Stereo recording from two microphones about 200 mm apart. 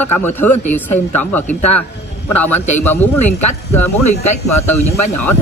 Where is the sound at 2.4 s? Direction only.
10° left (ahead or behind).